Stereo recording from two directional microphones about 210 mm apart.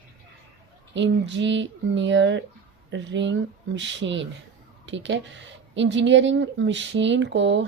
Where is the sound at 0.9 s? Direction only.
60° right (ahead or behind).